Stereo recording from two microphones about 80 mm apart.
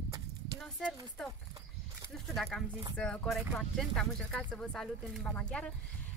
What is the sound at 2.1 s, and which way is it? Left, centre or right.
Speech, centre.